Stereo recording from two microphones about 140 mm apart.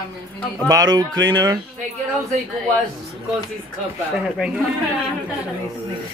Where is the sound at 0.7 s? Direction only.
25° right (ahead or behind).